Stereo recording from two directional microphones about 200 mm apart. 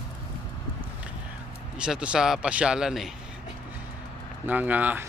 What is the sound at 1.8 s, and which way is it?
Speech, 5° right (ahead or behind).